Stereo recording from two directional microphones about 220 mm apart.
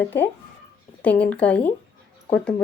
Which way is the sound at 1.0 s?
5° left (ahead or behind).